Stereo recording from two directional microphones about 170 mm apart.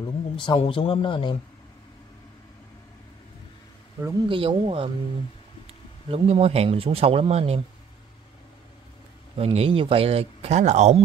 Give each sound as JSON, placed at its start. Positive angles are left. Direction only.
{"t": 0.0, "sound": "speech", "side_deg": 30}
{"t": 4.3, "sound": "speech", "side_deg": -30}
{"t": 6.0, "sound": "speech", "side_deg": -35}
{"t": 9.4, "sound": "speech", "side_deg": -35}